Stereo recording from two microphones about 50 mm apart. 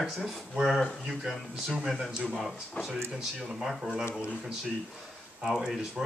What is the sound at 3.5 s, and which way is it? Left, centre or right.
Speech, centre.